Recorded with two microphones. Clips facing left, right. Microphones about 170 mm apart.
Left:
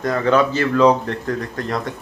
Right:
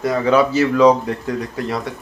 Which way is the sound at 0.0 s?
10° right (ahead or behind).